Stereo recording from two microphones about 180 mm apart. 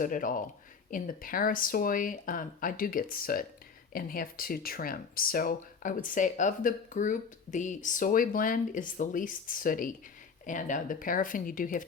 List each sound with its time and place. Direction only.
0.0 s speech: 50° left (ahead or behind)